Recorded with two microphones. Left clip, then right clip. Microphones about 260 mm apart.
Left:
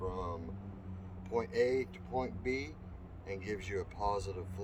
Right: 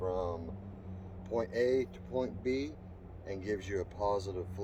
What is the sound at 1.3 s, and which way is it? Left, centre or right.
Speech, centre.